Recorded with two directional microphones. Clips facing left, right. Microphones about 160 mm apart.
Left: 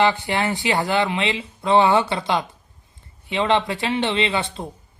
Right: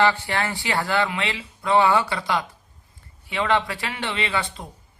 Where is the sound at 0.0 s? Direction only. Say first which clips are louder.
Left 2 dB; 20° left (ahead or behind).